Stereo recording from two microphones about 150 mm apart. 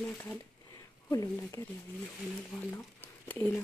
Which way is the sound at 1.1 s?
20° left (ahead or behind).